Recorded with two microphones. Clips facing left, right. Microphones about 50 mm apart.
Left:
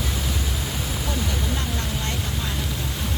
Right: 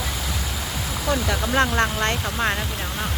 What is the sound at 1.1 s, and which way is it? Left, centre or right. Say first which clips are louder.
Speech: right 8 dB; right.